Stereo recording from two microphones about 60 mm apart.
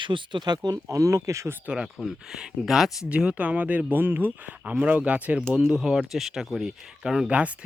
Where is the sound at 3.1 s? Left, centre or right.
Centre.